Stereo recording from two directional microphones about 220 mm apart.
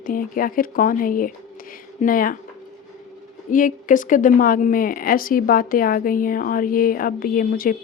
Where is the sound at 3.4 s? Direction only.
35° left (ahead or behind).